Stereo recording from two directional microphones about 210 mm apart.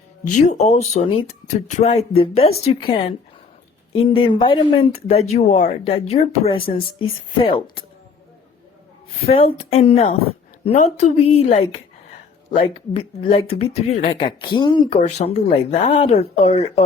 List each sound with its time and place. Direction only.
0.3 s speech: 35° left (ahead or behind)
9.3 s speech: 25° left (ahead or behind)